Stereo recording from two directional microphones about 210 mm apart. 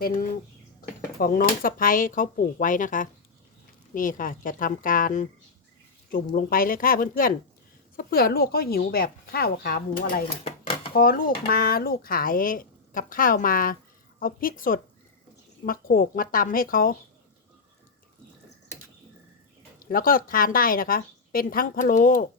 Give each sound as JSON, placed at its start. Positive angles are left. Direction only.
{"t": 0.0, "sound": "a woman's voice", "side_deg": 45}
{"t": 10.2, "sound": "dishes", "side_deg": 30}
{"t": 10.9, "sound": "a woman's voice", "side_deg": 45}
{"t": 19.8, "sound": "a woman's voice", "side_deg": 40}